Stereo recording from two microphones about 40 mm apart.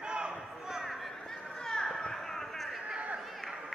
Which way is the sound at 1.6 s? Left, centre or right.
Centre.